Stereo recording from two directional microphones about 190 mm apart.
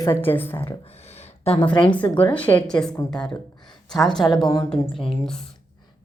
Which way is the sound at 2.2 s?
10° left (ahead or behind).